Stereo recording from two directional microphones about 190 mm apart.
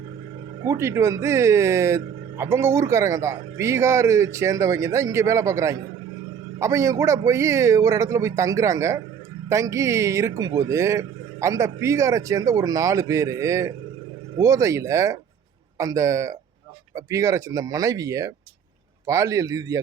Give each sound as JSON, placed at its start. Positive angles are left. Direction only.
{"t": 0.6, "sound": "speech", "side_deg": -15}